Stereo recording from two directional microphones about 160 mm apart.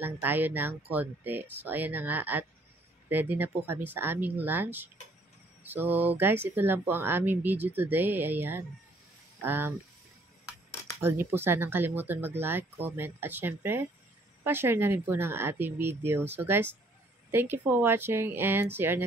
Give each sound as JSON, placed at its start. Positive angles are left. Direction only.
{"t": 0.0, "sound": "speech", "side_deg": -10}
{"t": 11.0, "sound": "speech", "side_deg": -15}